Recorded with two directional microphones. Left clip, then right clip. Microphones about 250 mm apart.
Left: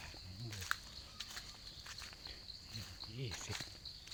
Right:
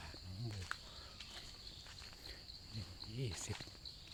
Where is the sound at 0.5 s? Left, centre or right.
Left.